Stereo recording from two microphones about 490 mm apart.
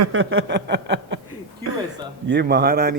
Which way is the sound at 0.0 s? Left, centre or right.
Right.